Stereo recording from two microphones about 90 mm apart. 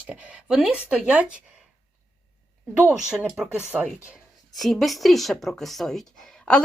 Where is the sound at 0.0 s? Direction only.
15° right (ahead or behind).